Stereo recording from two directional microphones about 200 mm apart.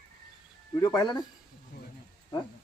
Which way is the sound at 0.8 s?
20° left (ahead or behind).